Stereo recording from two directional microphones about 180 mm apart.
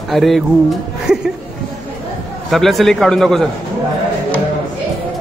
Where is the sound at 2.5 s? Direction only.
Centre (ahead or behind).